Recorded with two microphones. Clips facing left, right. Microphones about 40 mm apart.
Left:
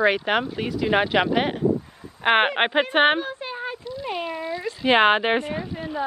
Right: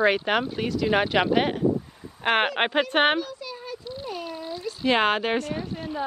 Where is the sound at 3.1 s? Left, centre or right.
Left.